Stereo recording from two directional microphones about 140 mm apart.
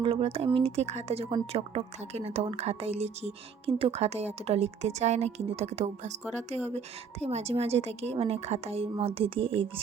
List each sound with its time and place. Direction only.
0.0 s speech: 45° right (ahead or behind)